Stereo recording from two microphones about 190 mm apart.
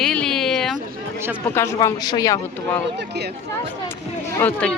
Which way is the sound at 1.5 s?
15° left (ahead or behind).